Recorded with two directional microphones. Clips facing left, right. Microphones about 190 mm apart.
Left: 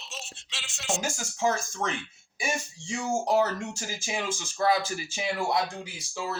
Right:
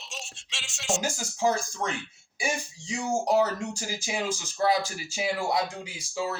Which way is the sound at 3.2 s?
15° right (ahead or behind).